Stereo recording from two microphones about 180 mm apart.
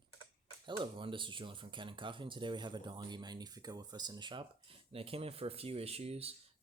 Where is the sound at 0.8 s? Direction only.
25° right (ahead or behind).